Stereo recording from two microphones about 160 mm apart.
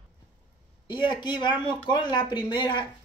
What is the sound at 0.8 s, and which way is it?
Speech, 30° left (ahead or behind).